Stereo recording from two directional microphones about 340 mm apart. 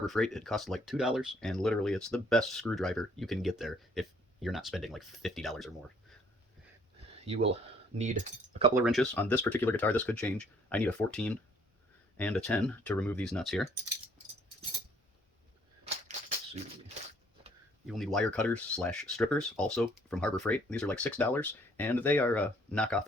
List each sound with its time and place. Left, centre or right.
0.0 s speech: centre
8.5 s speech: centre
8.8 s speech: centre
17.8 s speech: centre